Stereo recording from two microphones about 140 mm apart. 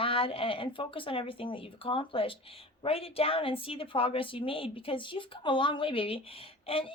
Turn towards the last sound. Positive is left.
turn(degrees=40)  # may be behind; listen again after turning